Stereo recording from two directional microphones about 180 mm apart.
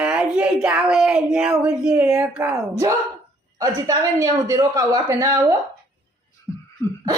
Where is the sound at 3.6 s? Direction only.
20° right (ahead or behind).